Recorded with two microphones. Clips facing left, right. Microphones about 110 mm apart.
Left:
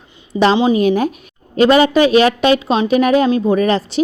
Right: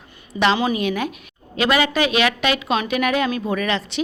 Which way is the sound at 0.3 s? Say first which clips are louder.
Left 6 dB; 30° left (ahead or behind).